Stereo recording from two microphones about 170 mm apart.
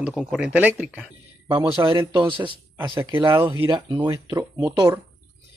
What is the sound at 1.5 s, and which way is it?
Speech, 30° right (ahead or behind).